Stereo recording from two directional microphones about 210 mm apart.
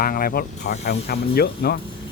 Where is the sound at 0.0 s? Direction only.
45° left (ahead or behind).